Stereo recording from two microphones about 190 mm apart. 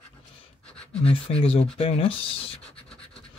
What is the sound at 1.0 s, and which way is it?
Speech, 30° left (ahead or behind).